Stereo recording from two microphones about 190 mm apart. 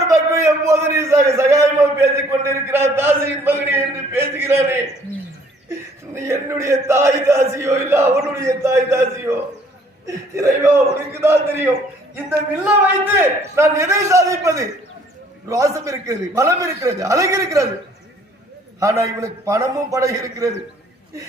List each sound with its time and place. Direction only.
0.1 s a man's voice: 15° right (ahead or behind)
6.1 s a man's voice: 15° right (ahead or behind)
18.8 s a man's voice: 15° right (ahead or behind)